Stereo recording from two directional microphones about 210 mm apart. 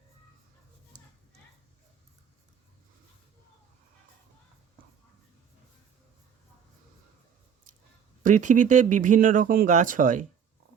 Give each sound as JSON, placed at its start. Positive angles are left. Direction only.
{"t": 8.2, "sound": "speech", "side_deg": -35}